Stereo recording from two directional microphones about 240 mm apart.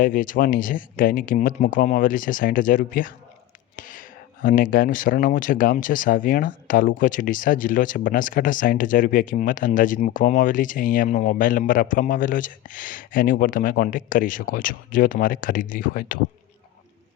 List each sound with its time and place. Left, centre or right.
0.0 s speech: left